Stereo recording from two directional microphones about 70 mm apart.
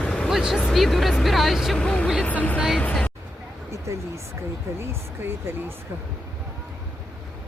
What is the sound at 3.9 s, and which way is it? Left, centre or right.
Speech, right.